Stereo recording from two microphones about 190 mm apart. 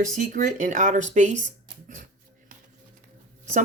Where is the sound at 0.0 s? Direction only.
40° right (ahead or behind).